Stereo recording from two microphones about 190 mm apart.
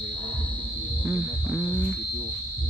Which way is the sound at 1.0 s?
10° right (ahead or behind).